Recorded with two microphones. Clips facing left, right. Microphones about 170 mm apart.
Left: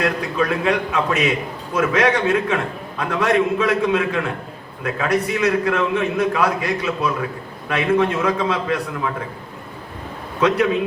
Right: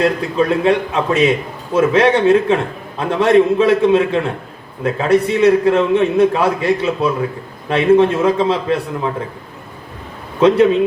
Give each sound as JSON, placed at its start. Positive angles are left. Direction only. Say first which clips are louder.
{"t": 0.0, "sound": "a man's voice", "louder": "right 5 dB", "side_deg": -25}
{"t": 10.4, "sound": "a man's voice", "louder": "right 7 dB", "side_deg": -30}